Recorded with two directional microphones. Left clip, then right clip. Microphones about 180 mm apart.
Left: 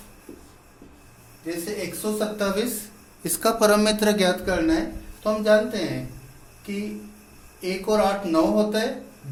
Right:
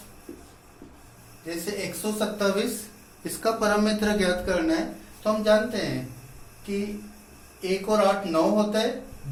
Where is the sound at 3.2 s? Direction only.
65° left (ahead or behind).